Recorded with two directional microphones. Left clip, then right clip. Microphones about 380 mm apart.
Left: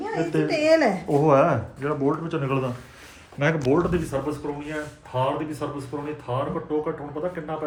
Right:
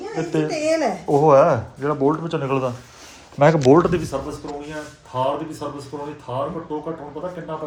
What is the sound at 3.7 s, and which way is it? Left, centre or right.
Speech, right.